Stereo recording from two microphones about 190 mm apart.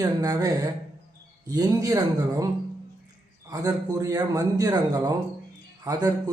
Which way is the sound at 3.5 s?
20° right (ahead or behind).